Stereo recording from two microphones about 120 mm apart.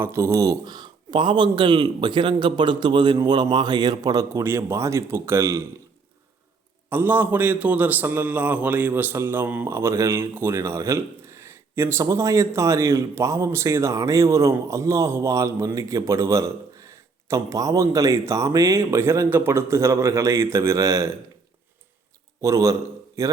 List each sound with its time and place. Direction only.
0.0 s speech: 25° right (ahead or behind)
6.9 s a man's voice: 15° right (ahead or behind)
22.4 s a man's voice: 25° right (ahead or behind)